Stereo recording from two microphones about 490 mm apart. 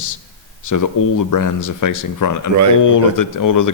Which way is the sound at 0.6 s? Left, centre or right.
Left.